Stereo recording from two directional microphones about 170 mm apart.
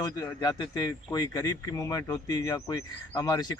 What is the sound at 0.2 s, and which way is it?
Speech, 20° left (ahead or behind).